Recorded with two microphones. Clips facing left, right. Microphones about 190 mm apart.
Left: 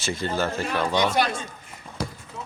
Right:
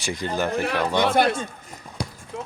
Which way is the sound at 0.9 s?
55° right (ahead or behind).